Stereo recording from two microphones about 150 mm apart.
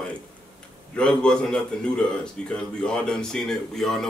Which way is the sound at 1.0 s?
5° left (ahead or behind).